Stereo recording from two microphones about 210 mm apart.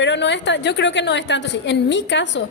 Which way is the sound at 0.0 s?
55° left (ahead or behind).